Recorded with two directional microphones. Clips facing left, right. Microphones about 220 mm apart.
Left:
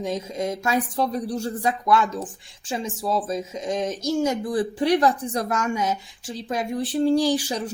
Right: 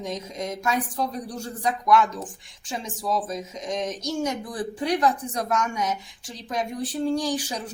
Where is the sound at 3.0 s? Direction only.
25° left (ahead or behind).